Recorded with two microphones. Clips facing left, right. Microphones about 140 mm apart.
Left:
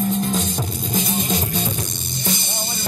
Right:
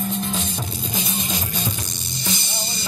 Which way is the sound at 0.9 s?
45° left (ahead or behind).